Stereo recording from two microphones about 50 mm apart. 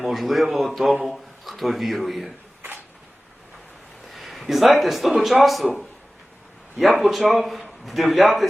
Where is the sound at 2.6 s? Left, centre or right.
Right.